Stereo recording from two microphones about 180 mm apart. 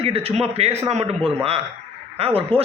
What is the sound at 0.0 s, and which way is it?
Speech, 35° right (ahead or behind).